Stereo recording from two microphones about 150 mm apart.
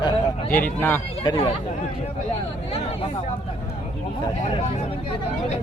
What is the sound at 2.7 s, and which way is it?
Speech, 40° left (ahead or behind).